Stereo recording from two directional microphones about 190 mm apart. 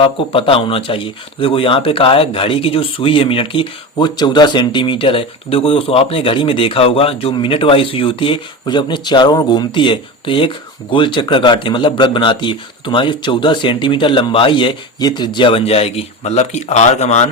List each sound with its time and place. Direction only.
0.0 s speech: 30° left (ahead or behind)